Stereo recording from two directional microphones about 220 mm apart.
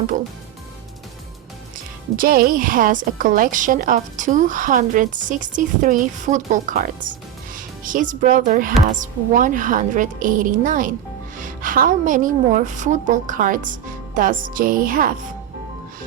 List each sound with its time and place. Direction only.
2.1 s a woman's voice: 40° right (ahead or behind)